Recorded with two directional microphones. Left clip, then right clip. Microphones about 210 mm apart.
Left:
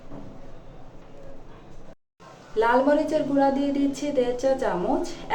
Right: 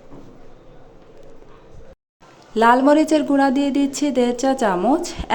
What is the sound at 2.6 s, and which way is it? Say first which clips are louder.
A woman's voice: right 6 dB; 55° right (ahead or behind).